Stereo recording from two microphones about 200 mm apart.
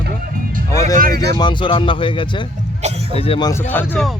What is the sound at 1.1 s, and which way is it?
Speech, 20° left (ahead or behind).